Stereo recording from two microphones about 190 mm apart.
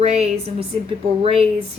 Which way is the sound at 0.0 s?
35° right (ahead or behind).